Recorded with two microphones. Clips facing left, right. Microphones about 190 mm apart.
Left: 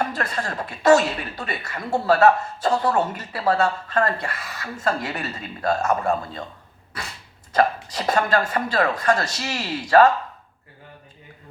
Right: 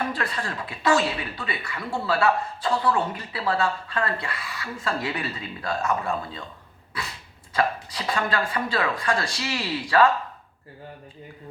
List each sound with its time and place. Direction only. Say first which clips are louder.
0.0 s speech: left 2 dB; 45° left (ahead or behind)
7.5 s speech: left 5 dB; 45° left (ahead or behind)